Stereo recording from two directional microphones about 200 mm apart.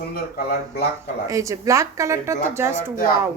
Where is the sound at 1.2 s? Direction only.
15° right (ahead or behind).